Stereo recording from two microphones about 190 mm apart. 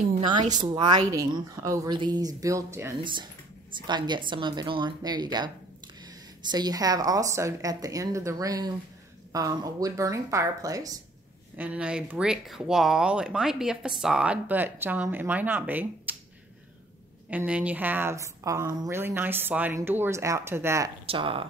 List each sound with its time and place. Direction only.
0.3 s a woman's voice: 25° right (ahead or behind)
11.5 s speech: 5° right (ahead or behind)
17.3 s speech: 5° right (ahead or behind)
21.0 s speech: 30° right (ahead or behind)